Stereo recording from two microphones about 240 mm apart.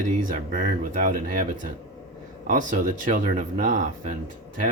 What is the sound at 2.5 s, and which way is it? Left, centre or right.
Speech, right.